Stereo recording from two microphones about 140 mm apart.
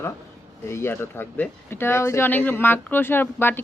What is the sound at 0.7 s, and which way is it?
Speech, 20° left (ahead or behind).